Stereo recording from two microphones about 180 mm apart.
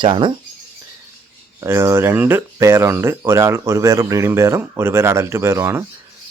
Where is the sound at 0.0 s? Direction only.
25° right (ahead or behind).